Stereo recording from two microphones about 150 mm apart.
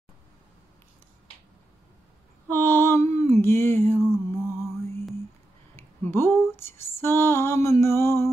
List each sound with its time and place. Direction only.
2.4 s mantra: 15° left (ahead or behind)
5.8 s female singing: 15° left (ahead or behind)
7.8 s music: 15° left (ahead or behind)